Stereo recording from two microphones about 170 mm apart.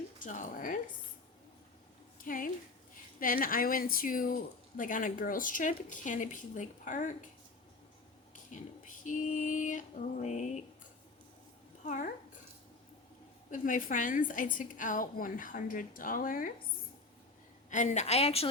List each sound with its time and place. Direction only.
0.2 s a woman's voice: 50° left (ahead or behind)
2.2 s a woman's voice: 55° left (ahead or behind)
8.4 s a woman's voice: 50° left (ahead or behind)
11.9 s a woman's voice: 50° left (ahead or behind)
13.5 s a woman's voice: 50° left (ahead or behind)
17.7 s a woman's voice: 45° left (ahead or behind)